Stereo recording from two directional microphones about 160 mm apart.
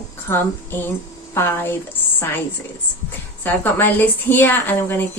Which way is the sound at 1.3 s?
15° left (ahead or behind).